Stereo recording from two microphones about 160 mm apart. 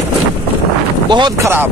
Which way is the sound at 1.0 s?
25° right (ahead or behind).